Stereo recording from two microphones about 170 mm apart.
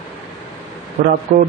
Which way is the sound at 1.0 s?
55° right (ahead or behind).